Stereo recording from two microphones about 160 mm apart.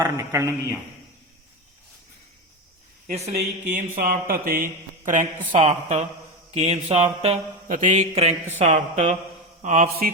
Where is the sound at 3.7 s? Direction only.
55° right (ahead or behind); by 7.4 s 40° right (ahead or behind).